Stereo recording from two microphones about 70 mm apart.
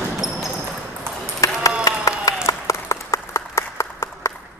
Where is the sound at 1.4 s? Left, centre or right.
Left.